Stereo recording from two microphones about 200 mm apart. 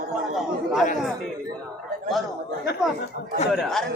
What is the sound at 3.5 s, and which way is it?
Speech, centre (ahead or behind).